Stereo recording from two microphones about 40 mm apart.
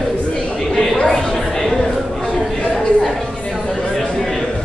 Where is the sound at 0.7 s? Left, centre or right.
Centre.